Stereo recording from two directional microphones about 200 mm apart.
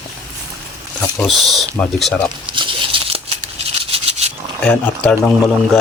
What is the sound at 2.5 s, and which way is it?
Tearing, 25° right (ahead or behind).